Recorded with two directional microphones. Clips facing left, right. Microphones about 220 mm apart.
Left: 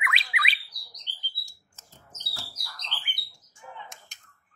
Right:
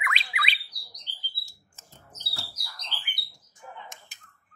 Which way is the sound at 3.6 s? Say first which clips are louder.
Even; 40° right (ahead or behind).